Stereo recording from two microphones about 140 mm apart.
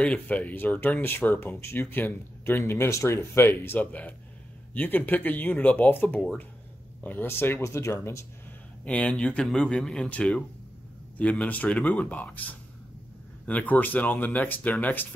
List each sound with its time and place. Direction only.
0.0 s speech: 10° left (ahead or behind)
8.8 s speech: 10° left (ahead or behind)